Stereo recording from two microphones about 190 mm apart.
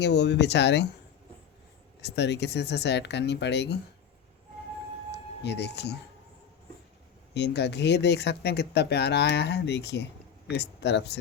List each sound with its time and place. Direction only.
0.0 s speech: 65° left (ahead or behind)
2.0 s speech: 65° left (ahead or behind)
5.4 s speech: 60° left (ahead or behind)
7.3 s speech: 65° left (ahead or behind)